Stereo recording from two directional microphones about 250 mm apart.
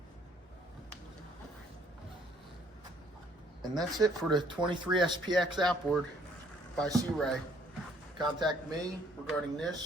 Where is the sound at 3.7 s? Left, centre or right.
Centre.